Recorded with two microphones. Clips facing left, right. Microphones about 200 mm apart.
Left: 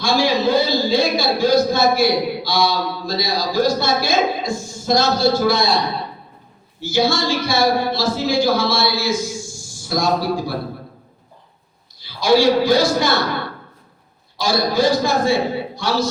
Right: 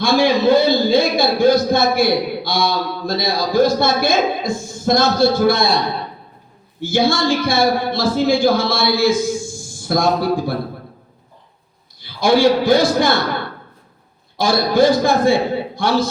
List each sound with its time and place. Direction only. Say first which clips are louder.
0.0 s a man's voice: right 3 dB; 55° right (ahead or behind)
6.7 s speech: right 2 dB; 55° right (ahead or behind)
11.9 s a man's voice: even; 55° right (ahead or behind)
14.3 s speech: right 3 dB; 55° right (ahead or behind)